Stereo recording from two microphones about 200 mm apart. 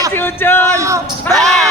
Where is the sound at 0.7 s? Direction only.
15° right (ahead or behind).